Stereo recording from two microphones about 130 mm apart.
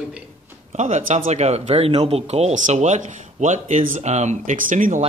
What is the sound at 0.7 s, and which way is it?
Speech, 65° right (ahead or behind).